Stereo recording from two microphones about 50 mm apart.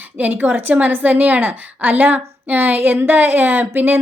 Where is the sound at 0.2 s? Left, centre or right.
Right.